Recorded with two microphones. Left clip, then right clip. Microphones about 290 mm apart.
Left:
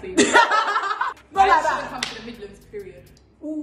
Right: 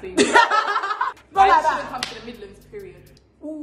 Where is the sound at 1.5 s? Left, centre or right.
Centre.